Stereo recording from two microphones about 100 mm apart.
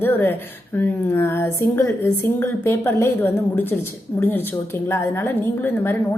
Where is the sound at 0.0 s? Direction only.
20° left (ahead or behind).